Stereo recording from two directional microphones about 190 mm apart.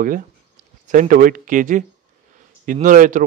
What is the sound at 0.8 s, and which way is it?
Speech, 45° right (ahead or behind).